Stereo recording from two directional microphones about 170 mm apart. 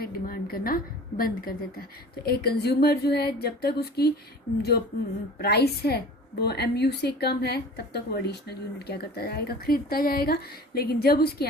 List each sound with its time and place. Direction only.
0.0 s a woman's voice: 60° left (ahead or behind)
5.4 s speech: 70° left (ahead or behind)